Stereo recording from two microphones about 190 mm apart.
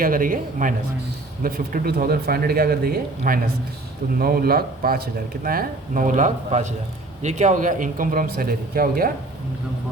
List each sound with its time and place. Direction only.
0.0 s speech: 45° right (ahead or behind)